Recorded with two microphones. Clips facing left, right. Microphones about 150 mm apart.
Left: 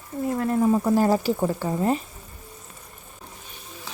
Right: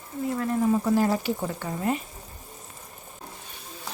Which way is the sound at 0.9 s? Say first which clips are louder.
Left 4 dB; 40° left (ahead or behind).